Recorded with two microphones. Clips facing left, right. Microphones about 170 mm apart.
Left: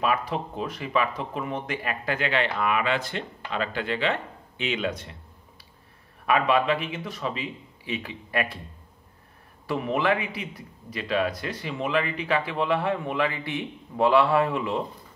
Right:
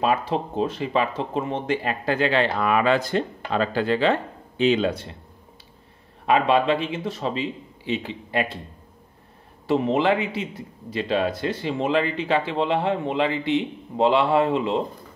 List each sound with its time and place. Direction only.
0.0 s speech: 30° right (ahead or behind)
6.2 s speech: 25° right (ahead or behind)
9.7 s speech: 25° right (ahead or behind)